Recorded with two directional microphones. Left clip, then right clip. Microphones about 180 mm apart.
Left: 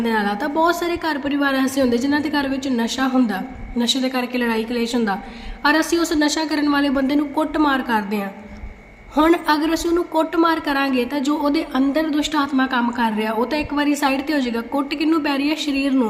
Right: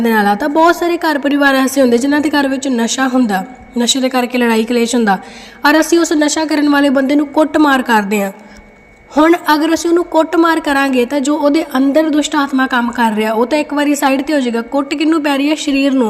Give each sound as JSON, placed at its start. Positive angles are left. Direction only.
{"t": 0.0, "sound": "a woman's voice", "side_deg": -40}
{"t": 9.1, "sound": "a woman's voice", "side_deg": -35}